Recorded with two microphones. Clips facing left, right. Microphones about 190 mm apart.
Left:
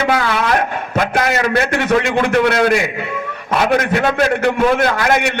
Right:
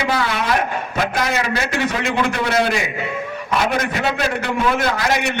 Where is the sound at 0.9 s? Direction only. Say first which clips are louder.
Left 4 dB; 55° left (ahead or behind).